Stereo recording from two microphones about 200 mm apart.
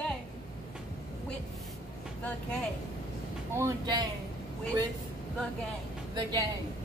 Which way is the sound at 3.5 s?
15° right (ahead or behind).